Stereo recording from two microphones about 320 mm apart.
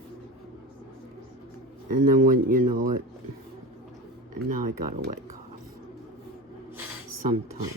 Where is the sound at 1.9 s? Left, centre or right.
Right.